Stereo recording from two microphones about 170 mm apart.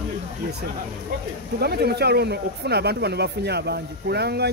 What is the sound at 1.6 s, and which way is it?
Speech, 70° right (ahead or behind).